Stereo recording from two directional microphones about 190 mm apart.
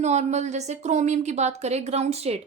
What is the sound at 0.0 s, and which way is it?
Speech, 35° right (ahead or behind).